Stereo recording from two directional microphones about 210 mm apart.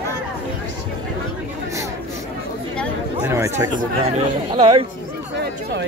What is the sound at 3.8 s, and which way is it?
Speech, 35° right (ahead or behind).